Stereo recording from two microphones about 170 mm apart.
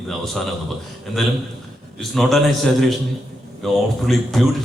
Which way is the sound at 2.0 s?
Centre (ahead or behind).